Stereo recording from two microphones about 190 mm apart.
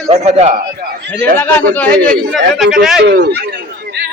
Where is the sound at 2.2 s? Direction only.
Centre (ahead or behind).